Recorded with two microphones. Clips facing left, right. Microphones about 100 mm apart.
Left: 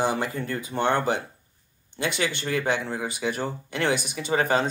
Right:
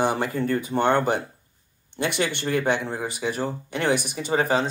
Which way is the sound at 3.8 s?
40° right (ahead or behind).